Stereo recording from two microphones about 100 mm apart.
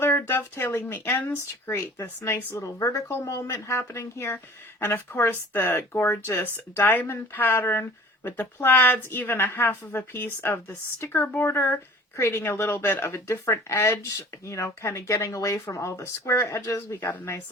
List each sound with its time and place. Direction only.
0.0 s speech: 20° left (ahead or behind)